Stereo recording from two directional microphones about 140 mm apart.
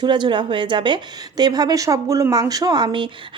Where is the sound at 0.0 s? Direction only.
35° right (ahead or behind).